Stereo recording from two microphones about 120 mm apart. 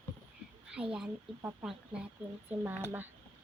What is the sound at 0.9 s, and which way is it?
Speech, 5° right (ahead or behind).